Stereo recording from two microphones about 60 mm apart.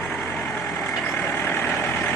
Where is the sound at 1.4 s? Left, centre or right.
Left.